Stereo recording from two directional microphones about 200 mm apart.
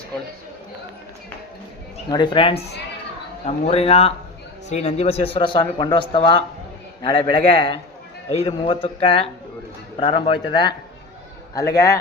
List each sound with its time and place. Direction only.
2.0 s a man's voice: 20° left (ahead or behind)